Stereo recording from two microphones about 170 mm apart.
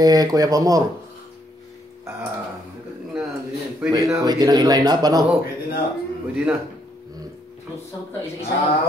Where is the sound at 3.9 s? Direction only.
20° right (ahead or behind).